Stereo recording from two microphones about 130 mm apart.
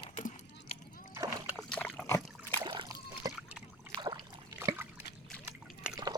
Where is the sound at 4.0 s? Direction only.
35° right (ahead or behind).